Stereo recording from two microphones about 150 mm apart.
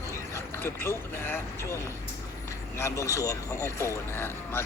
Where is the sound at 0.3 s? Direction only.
15° left (ahead or behind).